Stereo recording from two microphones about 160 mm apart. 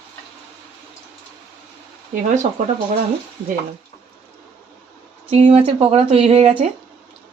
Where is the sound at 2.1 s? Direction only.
55° right (ahead or behind).